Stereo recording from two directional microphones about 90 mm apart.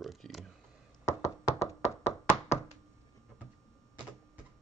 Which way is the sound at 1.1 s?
30° left (ahead or behind).